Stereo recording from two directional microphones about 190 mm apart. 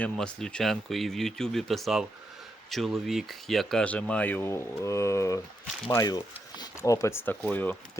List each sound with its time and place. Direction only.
0.0 s speech: 5° left (ahead or behind)